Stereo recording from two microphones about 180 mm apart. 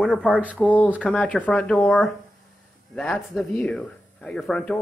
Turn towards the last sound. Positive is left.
turn(degrees=5)  # may be behind; listen again after turning